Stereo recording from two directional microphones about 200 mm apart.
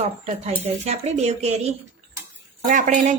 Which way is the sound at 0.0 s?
30° right (ahead or behind).